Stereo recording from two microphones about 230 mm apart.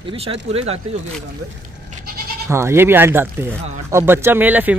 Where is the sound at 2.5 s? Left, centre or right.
Centre.